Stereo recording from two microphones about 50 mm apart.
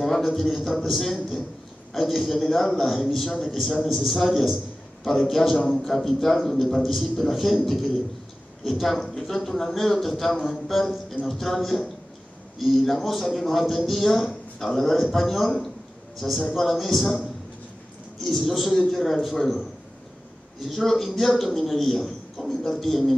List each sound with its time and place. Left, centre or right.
0.0 s a man's voice: centre
18.2 s a man's voice: centre
20.6 s a man's voice: centre